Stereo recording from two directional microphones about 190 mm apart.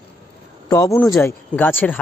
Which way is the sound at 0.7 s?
15° left (ahead or behind).